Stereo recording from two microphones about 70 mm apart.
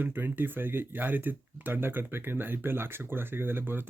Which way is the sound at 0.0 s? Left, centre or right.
Right.